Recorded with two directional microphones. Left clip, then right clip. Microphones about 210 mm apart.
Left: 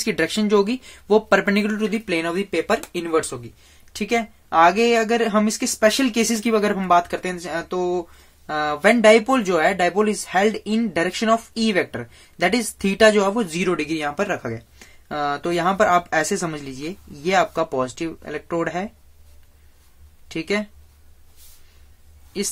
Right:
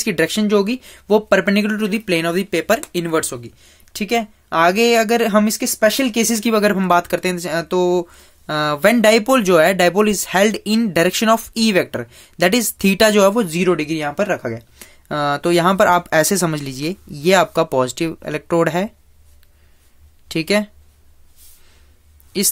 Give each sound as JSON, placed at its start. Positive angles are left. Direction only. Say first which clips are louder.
{"t": 0.0, "sound": "speech", "louder": "right 4 dB", "side_deg": -30}
{"t": 20.2, "sound": "speech", "louder": "right 6 dB", "side_deg": -40}